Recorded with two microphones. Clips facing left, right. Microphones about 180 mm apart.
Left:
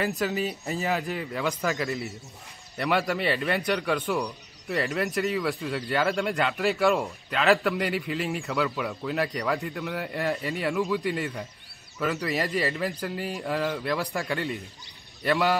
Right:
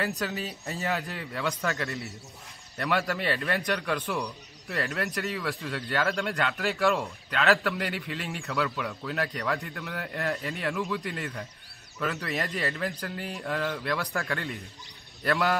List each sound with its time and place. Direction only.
0.2 s a man's voice: centre (ahead or behind)
1.7 s a man's voice: centre (ahead or behind)
15.2 s a man's voice: centre (ahead or behind)